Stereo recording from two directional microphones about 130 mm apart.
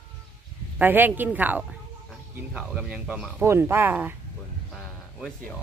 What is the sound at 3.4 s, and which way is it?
Speech, 20° right (ahead or behind).